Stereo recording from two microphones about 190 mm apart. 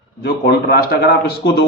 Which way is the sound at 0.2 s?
60° left (ahead or behind).